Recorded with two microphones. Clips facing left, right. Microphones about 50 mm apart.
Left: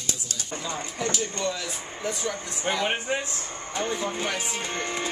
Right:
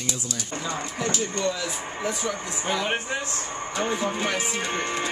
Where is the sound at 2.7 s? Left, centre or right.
Left.